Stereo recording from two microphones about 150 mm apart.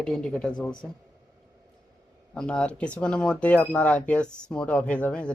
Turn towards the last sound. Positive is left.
turn(degrees=5)  # may be behind; listen again after turning